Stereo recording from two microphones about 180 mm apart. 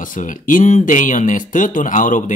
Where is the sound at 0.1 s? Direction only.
45° left (ahead or behind).